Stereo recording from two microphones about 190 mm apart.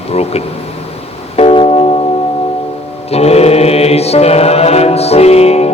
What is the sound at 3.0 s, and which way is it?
Mantra, 35° left (ahead or behind).